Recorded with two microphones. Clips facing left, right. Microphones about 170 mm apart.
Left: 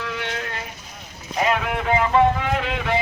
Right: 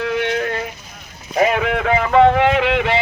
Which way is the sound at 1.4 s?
75° right (ahead or behind).